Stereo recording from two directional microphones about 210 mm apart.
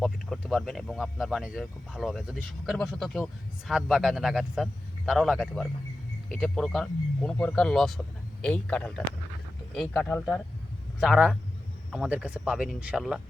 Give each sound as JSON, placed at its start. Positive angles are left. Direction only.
{"t": 0.0, "sound": "speech", "side_deg": 0}